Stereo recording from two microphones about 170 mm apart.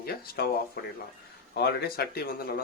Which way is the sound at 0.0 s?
70° left (ahead or behind).